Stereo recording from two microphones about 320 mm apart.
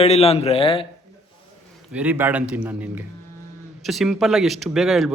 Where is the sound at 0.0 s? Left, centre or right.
Centre.